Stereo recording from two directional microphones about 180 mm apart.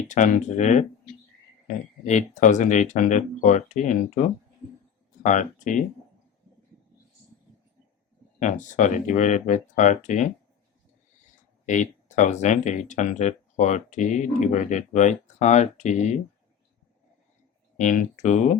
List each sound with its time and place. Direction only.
0.0 s speech: 45° left (ahead or behind)
8.4 s speech: 45° left (ahead or behind)
11.6 s speech: 40° left (ahead or behind)
17.7 s speech: 45° left (ahead or behind)